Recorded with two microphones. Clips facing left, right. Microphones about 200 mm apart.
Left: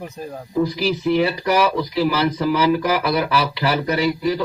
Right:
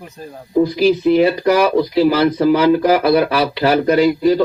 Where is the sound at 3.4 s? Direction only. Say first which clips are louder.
Right 6 dB; 45° right (ahead or behind).